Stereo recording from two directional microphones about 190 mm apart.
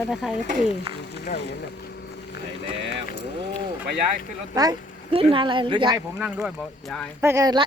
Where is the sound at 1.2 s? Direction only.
60° left (ahead or behind).